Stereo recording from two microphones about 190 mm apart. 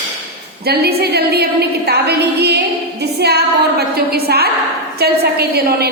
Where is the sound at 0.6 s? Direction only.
55° right (ahead or behind).